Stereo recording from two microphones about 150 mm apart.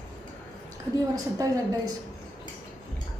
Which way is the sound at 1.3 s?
25° right (ahead or behind).